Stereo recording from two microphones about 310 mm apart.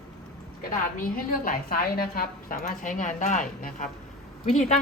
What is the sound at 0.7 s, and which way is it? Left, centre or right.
A woman's voice, left.